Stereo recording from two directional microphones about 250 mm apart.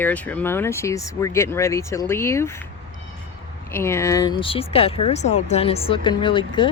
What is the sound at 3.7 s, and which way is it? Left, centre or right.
Speech, centre.